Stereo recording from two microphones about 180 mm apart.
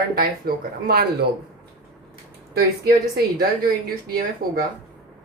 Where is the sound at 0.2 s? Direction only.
60° right (ahead or behind).